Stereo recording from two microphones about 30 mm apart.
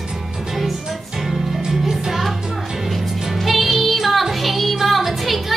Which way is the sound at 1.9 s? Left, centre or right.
Centre.